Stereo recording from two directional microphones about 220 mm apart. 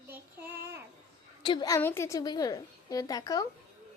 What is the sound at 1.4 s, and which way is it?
A woman's voice, 20° left (ahead or behind).